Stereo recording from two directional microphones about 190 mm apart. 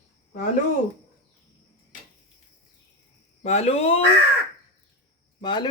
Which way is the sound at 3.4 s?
35° left (ahead or behind).